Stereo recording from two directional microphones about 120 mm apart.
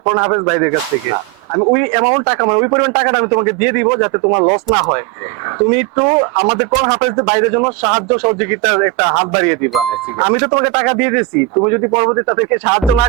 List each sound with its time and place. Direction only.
0.0 s a man's voice: 20° right (ahead or behind)
1.7 s a man's voice: 20° right (ahead or behind)